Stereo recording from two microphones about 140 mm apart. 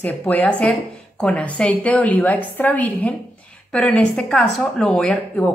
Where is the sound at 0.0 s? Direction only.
10° left (ahead or behind).